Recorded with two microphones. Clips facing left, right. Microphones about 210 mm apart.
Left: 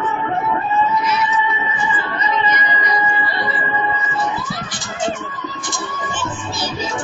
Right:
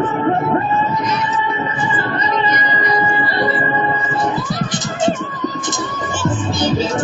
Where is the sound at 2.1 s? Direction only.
40° right (ahead or behind).